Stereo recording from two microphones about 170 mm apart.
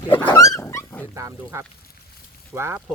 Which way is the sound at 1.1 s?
20° right (ahead or behind).